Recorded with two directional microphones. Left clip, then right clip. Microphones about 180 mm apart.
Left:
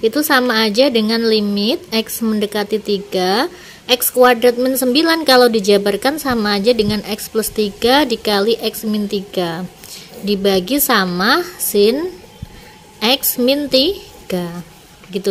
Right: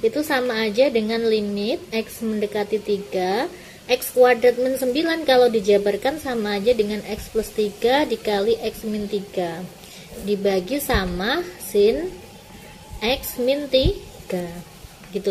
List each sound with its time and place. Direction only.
0.0 s speech: 55° left (ahead or behind)
13.0 s speech: 50° left (ahead or behind)